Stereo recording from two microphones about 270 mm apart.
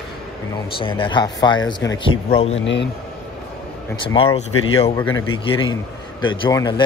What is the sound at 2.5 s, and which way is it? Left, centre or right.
Speech, left.